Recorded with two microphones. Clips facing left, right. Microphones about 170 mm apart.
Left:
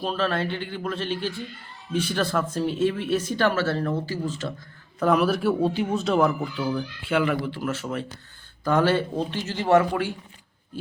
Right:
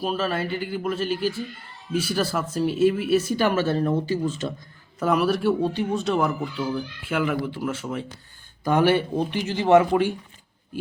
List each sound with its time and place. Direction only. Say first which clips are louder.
0.0 s speech: even; 5° right (ahead or behind)
4.9 s a man's voice: left 1 dB; centre (ahead or behind); by 9.8 s 15° right (ahead or behind)